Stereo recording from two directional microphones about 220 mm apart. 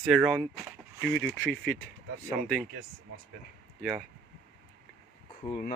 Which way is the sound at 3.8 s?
Centre (ahead or behind).